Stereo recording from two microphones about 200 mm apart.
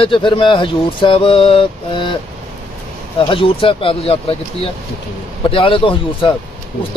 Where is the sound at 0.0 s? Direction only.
25° left (ahead or behind).